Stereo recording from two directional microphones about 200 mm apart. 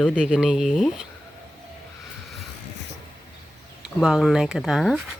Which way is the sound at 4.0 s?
Centre (ahead or behind).